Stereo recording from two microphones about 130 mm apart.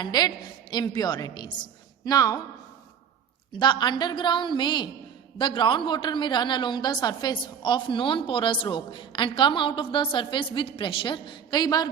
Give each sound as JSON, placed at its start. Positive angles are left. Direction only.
{"t": 0.0, "sound": "a woman's voice", "side_deg": 35}
{"t": 3.5, "sound": "a woman's voice", "side_deg": 35}